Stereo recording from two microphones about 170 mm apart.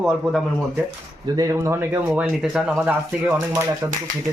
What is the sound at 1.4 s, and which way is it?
Speech, 15° right (ahead or behind).